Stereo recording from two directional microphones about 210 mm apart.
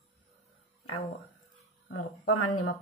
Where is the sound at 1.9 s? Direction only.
90° left.